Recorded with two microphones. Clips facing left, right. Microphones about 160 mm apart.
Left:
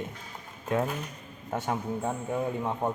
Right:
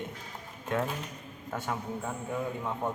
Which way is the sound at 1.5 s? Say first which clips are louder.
Left 4 dB; 25° left (ahead or behind).